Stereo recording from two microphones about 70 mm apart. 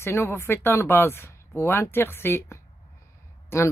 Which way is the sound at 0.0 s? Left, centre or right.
Left.